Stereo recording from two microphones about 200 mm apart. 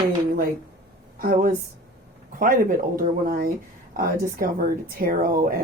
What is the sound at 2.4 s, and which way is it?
Speech, 45° right (ahead or behind).